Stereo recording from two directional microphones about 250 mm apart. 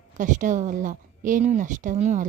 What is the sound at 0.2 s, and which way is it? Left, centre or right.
A woman's voice, right.